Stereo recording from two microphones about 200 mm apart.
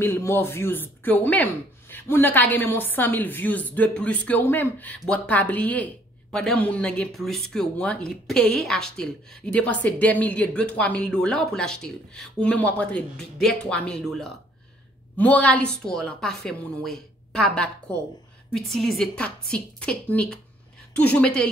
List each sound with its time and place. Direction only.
0.0 s speech: 10° left (ahead or behind)